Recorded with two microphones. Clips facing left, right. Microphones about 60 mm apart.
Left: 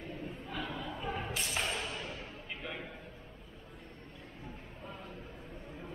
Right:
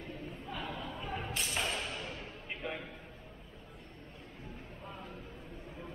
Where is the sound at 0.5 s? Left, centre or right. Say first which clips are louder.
Even; centre.